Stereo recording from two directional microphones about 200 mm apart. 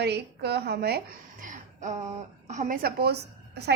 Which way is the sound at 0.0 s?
55° right (ahead or behind).